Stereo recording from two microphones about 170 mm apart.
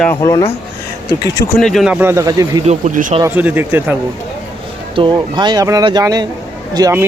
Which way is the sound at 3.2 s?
10° right (ahead or behind).